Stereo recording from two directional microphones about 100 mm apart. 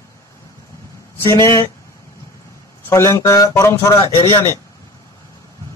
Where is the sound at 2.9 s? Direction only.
30° left (ahead or behind).